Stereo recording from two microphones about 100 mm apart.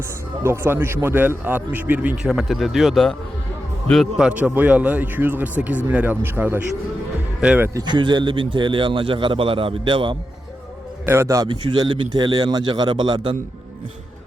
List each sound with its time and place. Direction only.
0.4 s a man's voice: 25° right (ahead or behind)
2.2 s speech: centre (ahead or behind)
4.2 s speech: 10° right (ahead or behind)
7.9 s a man's voice: 50° right (ahead or behind)
11.0 s a man's voice: 25° right (ahead or behind)
11.4 s speech: 50° right (ahead or behind)